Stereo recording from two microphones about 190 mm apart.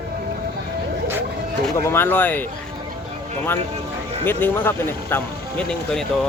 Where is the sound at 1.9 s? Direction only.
10° left (ahead or behind).